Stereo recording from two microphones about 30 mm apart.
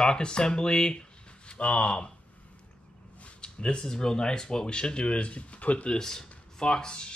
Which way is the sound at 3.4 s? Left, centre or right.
Left.